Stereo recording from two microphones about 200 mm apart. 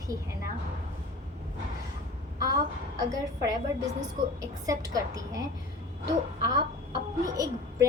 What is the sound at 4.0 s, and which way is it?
A woman's voice, 15° right (ahead or behind).